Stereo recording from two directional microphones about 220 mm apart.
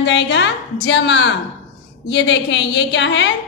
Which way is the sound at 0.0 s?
55° left (ahead or behind).